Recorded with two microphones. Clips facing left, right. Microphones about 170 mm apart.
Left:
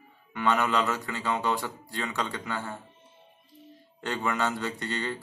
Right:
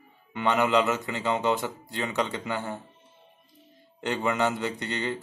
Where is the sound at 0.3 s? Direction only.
20° right (ahead or behind).